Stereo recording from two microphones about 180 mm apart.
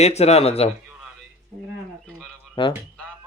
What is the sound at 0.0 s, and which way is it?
Speech, 35° left (ahead or behind).